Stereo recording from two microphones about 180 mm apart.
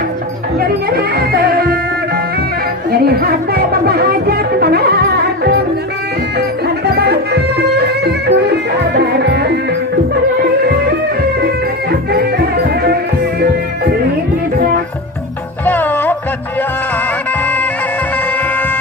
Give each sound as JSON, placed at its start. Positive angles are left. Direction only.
{"t": 0.9, "sound": "music", "side_deg": -60}
{"t": 2.9, "sound": "music", "side_deg": -60}
{"t": 6.9, "sound": "music", "side_deg": -65}
{"t": 15.6, "sound": "music", "side_deg": 10}